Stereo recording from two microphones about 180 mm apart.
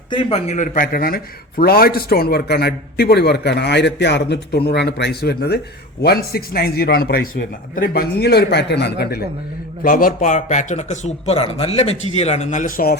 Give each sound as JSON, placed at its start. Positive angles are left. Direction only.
{"t": 0.1, "sound": "a man's voice", "side_deg": 30}
{"t": 9.8, "sound": "a man's voice", "side_deg": 50}